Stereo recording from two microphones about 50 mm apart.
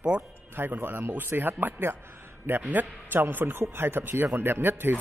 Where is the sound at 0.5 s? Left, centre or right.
Right.